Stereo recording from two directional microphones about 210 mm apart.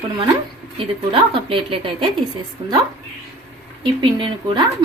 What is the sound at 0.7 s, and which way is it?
Speech, 25° right (ahead or behind).